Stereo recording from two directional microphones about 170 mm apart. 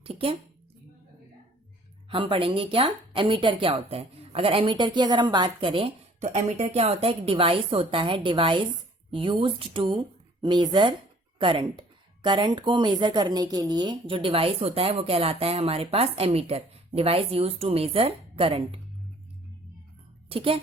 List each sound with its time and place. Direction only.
0.0 s a sound: 35° right (ahead or behind)
2.0 s speech: 30° right (ahead or behind)
20.3 s speech: 30° right (ahead or behind)